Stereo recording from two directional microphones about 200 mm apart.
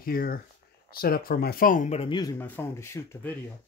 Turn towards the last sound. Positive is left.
turn(degrees=10)  # may be behind; listen again after turning